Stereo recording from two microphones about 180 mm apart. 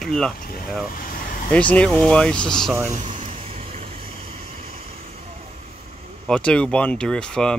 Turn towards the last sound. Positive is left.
turn(degrees=5)  # may be behind; listen again after turning